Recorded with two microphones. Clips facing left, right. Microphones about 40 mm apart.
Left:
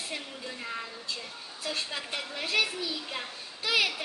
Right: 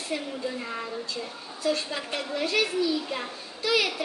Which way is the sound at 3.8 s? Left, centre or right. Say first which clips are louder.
Right 1 dB; centre.